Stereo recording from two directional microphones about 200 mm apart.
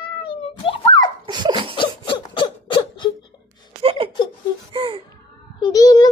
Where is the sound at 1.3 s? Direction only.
20° right (ahead or behind).